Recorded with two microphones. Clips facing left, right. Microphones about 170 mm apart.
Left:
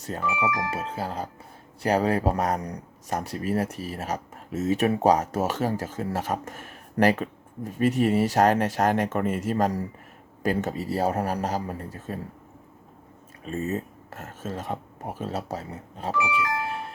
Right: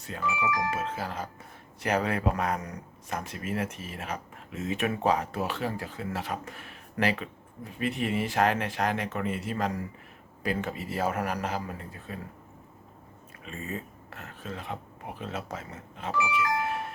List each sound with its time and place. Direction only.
0.0 s speech: 40° left (ahead or behind)
13.4 s speech: 40° left (ahead or behind)